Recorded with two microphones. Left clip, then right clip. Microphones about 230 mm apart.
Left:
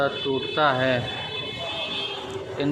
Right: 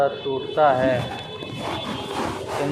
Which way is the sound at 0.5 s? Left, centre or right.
Left.